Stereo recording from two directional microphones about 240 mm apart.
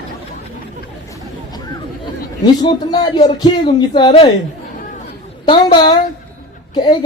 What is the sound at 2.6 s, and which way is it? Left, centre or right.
Speech, left.